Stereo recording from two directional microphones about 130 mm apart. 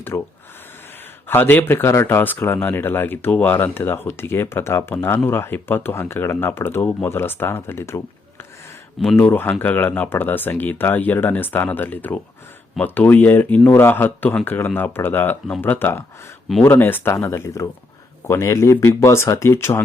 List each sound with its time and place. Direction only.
0.1 s speech: 20° left (ahead or behind)
1.3 s speech: 15° left (ahead or behind)
9.1 s speech: 15° left (ahead or behind)